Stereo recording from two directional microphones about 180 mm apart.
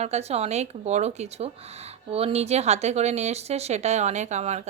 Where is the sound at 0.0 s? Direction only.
35° right (ahead or behind).